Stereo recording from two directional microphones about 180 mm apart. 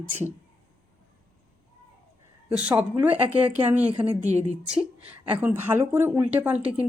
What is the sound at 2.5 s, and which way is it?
Speech, 5° right (ahead or behind).